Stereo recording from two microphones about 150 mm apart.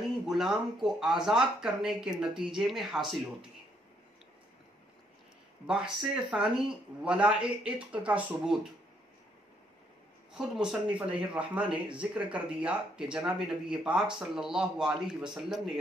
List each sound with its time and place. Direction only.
0.3 s speech: 5° right (ahead or behind)
5.7 s speech: 5° right (ahead or behind)
10.3 s speech: 5° right (ahead or behind)